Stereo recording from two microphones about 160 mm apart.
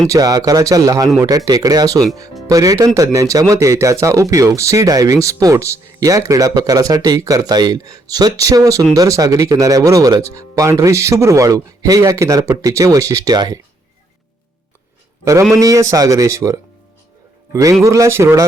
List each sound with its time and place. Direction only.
0.1 s speech: 25° right (ahead or behind)
15.2 s a man's voice: 20° right (ahead or behind)